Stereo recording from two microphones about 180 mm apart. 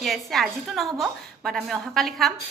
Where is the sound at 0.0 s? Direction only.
Centre (ahead or behind).